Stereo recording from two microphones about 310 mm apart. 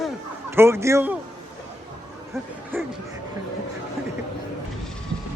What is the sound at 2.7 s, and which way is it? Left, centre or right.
Speech, centre.